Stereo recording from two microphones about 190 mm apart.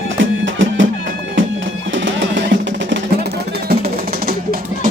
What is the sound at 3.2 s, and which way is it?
Music, 55° right (ahead or behind).